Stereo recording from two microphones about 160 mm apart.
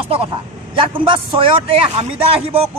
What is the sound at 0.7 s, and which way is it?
A man's voice, 30° right (ahead or behind).